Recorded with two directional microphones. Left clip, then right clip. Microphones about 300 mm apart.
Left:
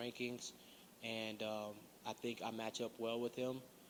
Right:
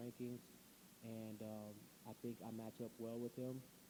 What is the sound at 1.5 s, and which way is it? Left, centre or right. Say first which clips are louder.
A man's voice: left 9 dB; centre.